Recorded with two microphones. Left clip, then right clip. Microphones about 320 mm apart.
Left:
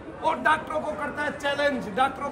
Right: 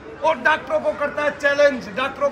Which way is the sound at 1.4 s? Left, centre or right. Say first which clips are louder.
Right 9 dB; centre.